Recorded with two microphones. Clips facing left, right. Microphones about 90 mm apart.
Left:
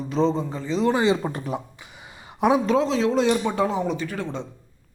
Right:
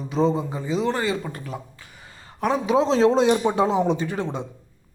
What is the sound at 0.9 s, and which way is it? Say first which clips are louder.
Speech: left 8 dB; 20° left (ahead or behind).